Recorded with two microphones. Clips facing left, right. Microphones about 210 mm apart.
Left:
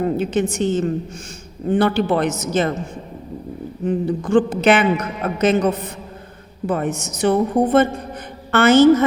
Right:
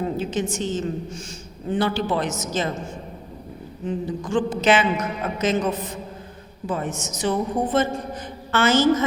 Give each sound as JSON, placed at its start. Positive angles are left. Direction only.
{"t": 0.2, "sound": "a man's voice", "side_deg": 60}
{"t": 3.8, "sound": "a man's voice", "side_deg": 55}